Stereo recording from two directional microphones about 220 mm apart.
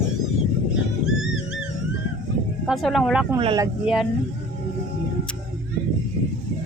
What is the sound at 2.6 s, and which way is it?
Speech, centre (ahead or behind).